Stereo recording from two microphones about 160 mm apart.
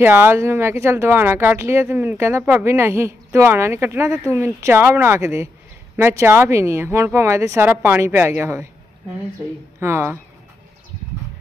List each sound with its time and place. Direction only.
0.0 s speech: 10° right (ahead or behind)
9.8 s speech: 15° right (ahead or behind)